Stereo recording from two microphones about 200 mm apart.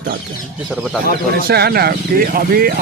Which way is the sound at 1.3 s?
50° right (ahead or behind).